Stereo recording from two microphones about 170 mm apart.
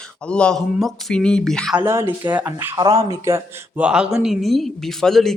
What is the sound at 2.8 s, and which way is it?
Speech, 25° right (ahead or behind).